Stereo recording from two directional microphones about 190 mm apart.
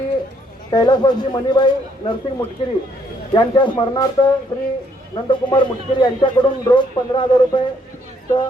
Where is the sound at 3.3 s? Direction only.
25° left (ahead or behind).